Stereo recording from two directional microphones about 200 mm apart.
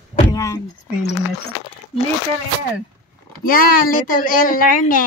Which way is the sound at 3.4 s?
45° left (ahead or behind).